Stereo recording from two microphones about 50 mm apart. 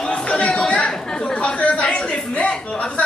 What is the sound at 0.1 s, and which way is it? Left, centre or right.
Chatter, left.